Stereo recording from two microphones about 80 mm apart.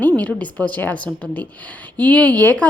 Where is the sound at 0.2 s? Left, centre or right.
Centre.